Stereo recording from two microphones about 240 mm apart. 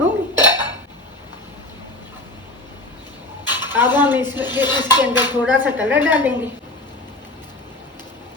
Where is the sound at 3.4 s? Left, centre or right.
Centre.